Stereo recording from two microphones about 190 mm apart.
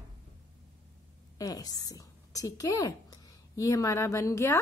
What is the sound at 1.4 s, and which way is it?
A woman's voice, 20° left (ahead or behind).